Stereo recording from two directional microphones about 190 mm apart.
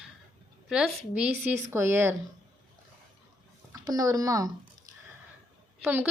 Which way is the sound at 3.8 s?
20° right (ahead or behind).